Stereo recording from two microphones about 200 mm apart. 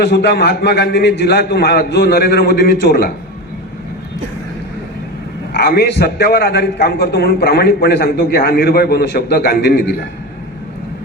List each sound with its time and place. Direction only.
0.0 s a man's voice: 55° left (ahead or behind)
5.5 s a man's voice: 50° left (ahead or behind)